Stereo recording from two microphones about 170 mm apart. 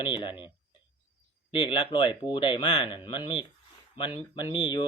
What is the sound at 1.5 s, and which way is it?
Speech, 30° left (ahead or behind).